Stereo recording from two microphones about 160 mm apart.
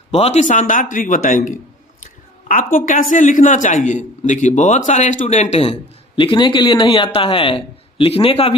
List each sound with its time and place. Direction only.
0.1 s a man's voice: 40° left (ahead or behind)
2.7 s a man's voice: 55° left (ahead or behind)
6.1 s a man's voice: 30° left (ahead or behind)